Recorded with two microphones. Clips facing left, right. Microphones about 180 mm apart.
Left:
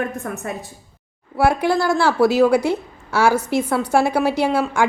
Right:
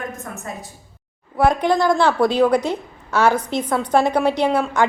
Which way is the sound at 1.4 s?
5° left (ahead or behind).